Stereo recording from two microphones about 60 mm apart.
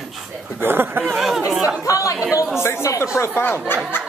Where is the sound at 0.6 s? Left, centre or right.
Right.